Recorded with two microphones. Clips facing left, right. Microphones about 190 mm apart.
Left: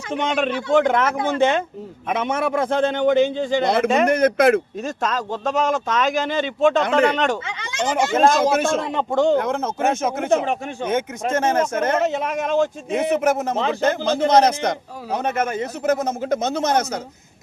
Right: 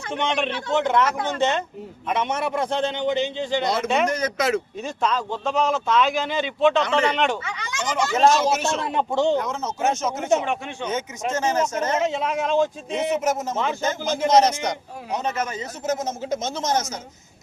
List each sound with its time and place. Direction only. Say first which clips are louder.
0.1 s a man's voice: left 3 dB; 40° left (ahead or behind); by 17.0 s 60° left (ahead or behind)